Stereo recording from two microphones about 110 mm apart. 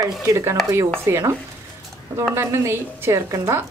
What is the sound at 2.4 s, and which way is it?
Speech, 25° right (ahead or behind).